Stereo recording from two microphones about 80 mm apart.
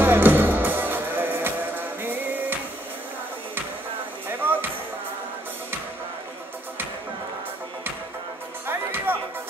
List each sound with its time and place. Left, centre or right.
0.0 s music: right
4.3 s music: right
8.6 s music: right